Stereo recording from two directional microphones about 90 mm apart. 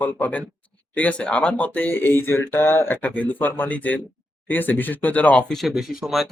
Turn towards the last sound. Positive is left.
turn(degrees=-5)  # may be behind; listen again after turning